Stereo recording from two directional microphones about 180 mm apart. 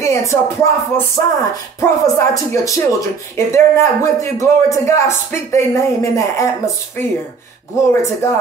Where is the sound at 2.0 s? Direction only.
20° left (ahead or behind).